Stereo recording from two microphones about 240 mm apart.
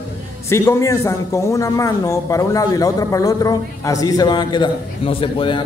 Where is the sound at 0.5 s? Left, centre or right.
Centre.